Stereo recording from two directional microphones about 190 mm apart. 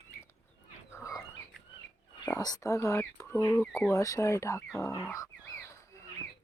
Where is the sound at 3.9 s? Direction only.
15° left (ahead or behind).